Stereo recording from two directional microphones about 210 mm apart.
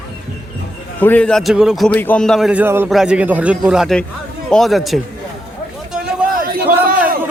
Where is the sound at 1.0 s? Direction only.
5° left (ahead or behind).